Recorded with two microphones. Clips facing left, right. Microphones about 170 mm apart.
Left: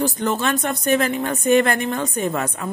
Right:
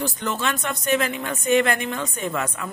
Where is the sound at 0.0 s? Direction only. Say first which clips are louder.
Left 5 dB; 40° left (ahead or behind).